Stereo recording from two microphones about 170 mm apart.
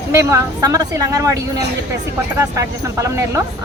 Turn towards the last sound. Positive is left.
turn(degrees=-20)  # may be behind; listen again after turning